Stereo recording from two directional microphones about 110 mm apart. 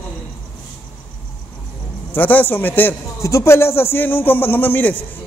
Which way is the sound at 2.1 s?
15° left (ahead or behind).